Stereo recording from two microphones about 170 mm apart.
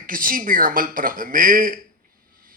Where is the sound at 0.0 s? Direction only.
55° right (ahead or behind).